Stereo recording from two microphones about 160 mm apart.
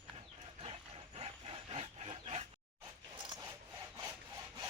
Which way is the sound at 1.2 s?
40° right (ahead or behind).